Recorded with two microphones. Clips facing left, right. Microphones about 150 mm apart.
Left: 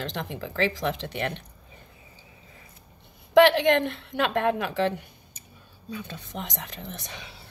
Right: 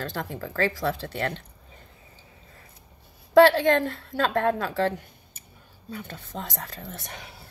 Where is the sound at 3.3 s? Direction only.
20° left (ahead or behind).